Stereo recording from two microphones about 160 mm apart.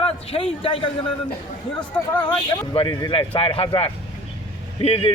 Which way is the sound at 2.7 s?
30° left (ahead or behind).